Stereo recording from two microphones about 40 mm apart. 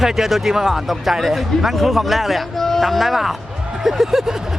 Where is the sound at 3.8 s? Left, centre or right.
Centre.